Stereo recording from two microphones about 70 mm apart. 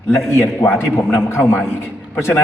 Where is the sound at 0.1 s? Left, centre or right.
Left.